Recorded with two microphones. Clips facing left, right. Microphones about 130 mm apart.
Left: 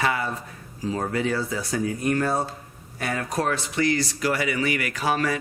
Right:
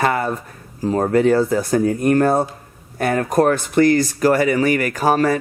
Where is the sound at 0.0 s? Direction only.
50° right (ahead or behind).